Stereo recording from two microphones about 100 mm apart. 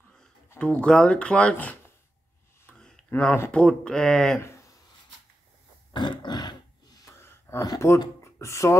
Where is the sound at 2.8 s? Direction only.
5° left (ahead or behind).